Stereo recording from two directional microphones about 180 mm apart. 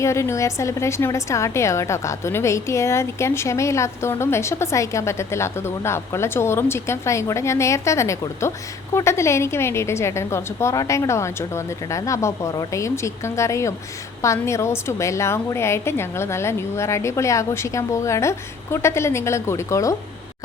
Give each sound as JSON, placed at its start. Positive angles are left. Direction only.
{"t": 0.0, "sound": "a woman's voice", "side_deg": 15}